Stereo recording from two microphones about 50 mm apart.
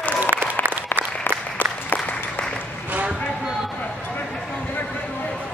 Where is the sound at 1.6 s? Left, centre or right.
Right.